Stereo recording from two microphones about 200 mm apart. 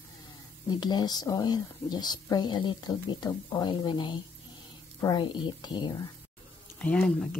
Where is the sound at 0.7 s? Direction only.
20° left (ahead or behind).